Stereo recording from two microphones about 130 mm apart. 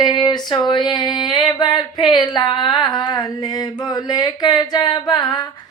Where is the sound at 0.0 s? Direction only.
35° left (ahead or behind).